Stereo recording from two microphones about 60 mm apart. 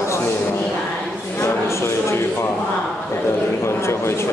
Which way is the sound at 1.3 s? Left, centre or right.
Left.